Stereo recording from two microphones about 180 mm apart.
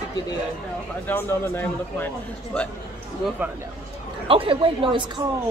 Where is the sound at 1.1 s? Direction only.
10° left (ahead or behind).